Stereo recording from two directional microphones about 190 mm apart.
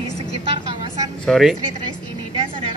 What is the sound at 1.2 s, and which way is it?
Speech, centre (ahead or behind).